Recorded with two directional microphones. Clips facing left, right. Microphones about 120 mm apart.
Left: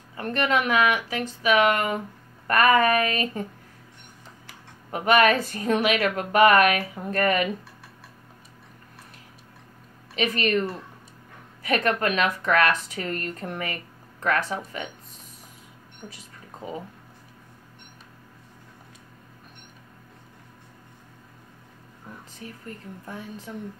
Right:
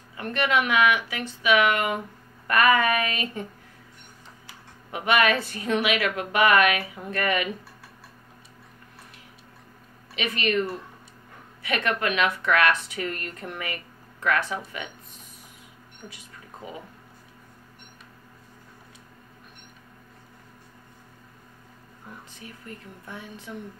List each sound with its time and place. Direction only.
0.1 s speech: 40° left (ahead or behind)
4.5 s speech: 40° left (ahead or behind)
10.1 s speech: 40° left (ahead or behind)
11.6 s speech: 40° left (ahead or behind)
16.6 s speech: 35° left (ahead or behind)
22.4 s speech: 40° left (ahead or behind)